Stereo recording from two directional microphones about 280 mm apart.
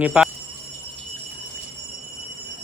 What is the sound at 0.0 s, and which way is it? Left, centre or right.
Speech, centre.